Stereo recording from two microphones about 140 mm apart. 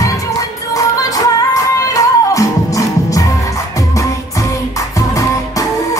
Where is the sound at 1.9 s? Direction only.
25° left (ahead or behind).